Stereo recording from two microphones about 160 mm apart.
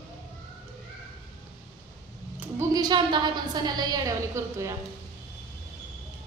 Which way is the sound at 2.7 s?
25° right (ahead or behind).